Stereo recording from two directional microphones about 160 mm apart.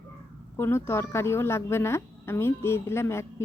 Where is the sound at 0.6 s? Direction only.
15° left (ahead or behind).